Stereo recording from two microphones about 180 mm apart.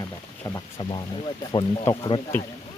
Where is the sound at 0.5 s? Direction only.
25° left (ahead or behind).